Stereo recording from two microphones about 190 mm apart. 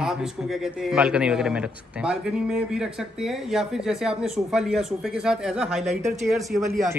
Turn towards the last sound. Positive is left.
turn(degrees=0)  # may be behind; listen again after turning